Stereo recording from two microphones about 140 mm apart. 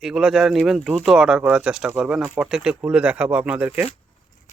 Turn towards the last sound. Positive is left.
turn(degrees=-10)  # may be behind; listen again after turning